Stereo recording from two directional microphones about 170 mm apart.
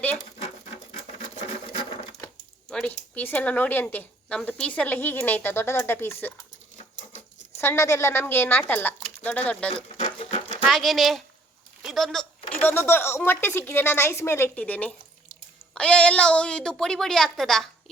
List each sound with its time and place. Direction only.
0.9 s sewing machine: 40° left (ahead or behind)
2.2 s speech: 5° left (ahead or behind)
7.6 s speech: 15° left (ahead or behind)
9.6 s a sound: 35° left (ahead or behind)
10.7 s a woman's voice: centre (ahead or behind)
12.6 s a woman's voice: 15° left (ahead or behind)